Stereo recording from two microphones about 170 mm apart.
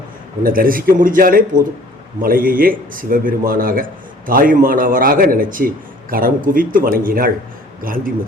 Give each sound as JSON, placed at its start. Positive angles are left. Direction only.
{"t": 0.4, "sound": "a man's voice", "side_deg": -55}